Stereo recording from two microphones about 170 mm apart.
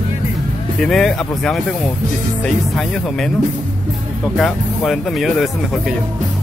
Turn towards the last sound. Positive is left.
turn(degrees=0)  # may be behind; listen again after turning